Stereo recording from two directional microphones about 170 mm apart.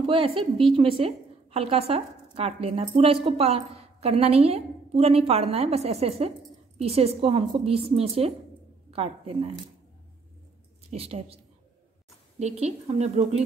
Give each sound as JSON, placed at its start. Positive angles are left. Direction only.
{"t": 0.0, "sound": "a woman's voice", "side_deg": -30}
{"t": 10.9, "sound": "a woman's voice", "side_deg": -35}
{"t": 12.4, "sound": "a woman's voice", "side_deg": -40}